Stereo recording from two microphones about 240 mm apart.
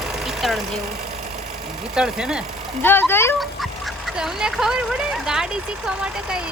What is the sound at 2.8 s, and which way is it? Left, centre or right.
Speech, centre.